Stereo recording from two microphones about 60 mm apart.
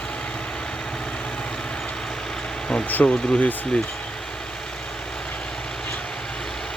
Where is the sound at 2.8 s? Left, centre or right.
Left.